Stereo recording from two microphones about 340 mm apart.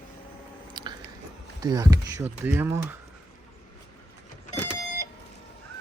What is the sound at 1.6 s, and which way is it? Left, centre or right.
Speech, centre.